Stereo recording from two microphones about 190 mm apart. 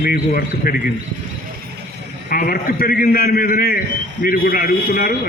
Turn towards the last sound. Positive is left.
turn(degrees=50)  # may be behind; listen again after turning